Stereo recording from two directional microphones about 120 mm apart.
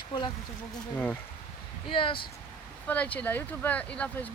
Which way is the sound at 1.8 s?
45° left (ahead or behind).